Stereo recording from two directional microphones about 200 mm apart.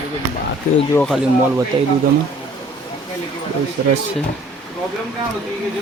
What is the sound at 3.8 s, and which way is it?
Speech, 55° right (ahead or behind).